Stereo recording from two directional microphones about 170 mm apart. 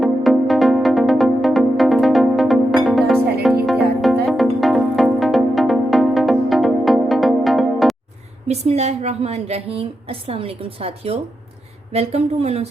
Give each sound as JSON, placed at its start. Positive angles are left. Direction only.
{"t": 0.0, "sound": "music", "side_deg": 0}
{"t": 8.4, "sound": "a woman's voice", "side_deg": -40}